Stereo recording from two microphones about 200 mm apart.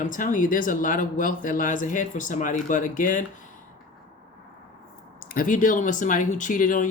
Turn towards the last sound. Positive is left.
turn(degrees=40)  # may be behind; listen again after turning